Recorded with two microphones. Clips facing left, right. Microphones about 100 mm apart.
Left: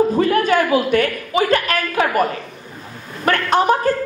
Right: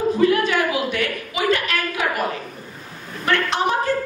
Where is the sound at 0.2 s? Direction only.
45° left (ahead or behind).